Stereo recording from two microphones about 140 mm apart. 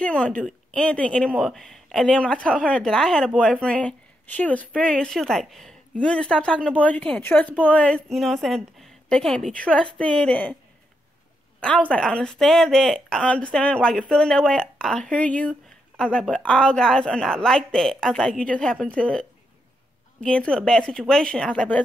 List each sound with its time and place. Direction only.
0.0 s a woman's voice: 10° left (ahead or behind)
11.6 s a woman's voice: 10° left (ahead or behind)